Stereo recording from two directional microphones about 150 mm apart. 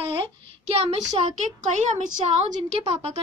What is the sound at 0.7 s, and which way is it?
Speech, 45° right (ahead or behind).